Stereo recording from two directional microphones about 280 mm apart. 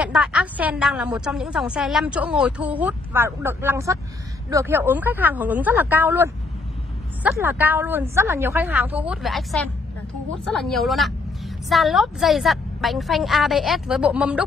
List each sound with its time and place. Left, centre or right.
0.0 s a woman's voice: centre